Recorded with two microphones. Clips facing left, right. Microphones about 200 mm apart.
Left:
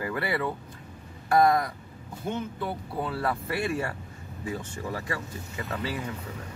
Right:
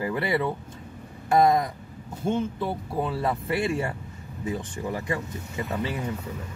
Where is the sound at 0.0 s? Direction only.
20° right (ahead or behind).